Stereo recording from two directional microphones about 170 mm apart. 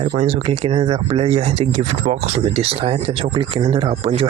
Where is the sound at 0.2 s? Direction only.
40° right (ahead or behind).